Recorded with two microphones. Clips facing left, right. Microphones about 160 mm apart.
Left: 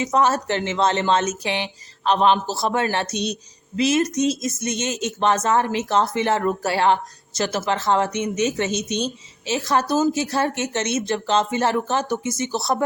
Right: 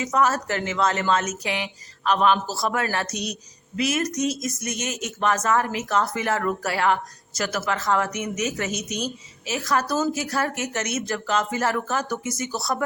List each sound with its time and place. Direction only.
0.0 s speech: 25° left (ahead or behind)